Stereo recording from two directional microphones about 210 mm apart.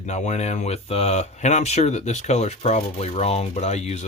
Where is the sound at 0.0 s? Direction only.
35° left (ahead or behind).